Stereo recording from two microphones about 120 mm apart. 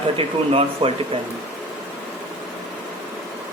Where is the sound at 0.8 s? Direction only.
65° right (ahead or behind).